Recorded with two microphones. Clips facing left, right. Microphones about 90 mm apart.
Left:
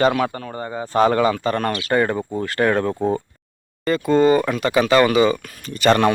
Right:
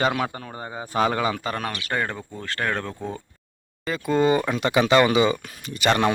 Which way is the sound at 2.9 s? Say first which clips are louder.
Left 11 dB; 55° left (ahead or behind).